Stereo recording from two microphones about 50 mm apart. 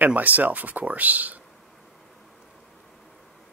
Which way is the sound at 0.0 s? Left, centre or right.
Right.